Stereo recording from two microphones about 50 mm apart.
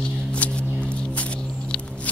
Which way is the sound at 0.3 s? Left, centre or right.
Left.